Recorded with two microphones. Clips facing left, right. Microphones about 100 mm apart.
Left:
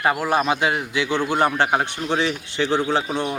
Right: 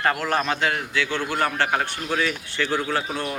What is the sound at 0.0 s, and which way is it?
Speech, 10° left (ahead or behind).